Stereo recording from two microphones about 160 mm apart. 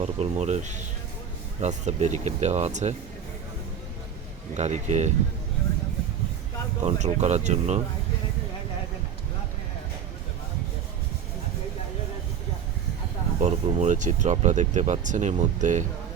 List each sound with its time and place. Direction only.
0.0 s speech: 45° right (ahead or behind)
4.5 s speech: 45° right (ahead or behind)
6.8 s speech: 45° right (ahead or behind)
13.4 s speech: 45° right (ahead or behind)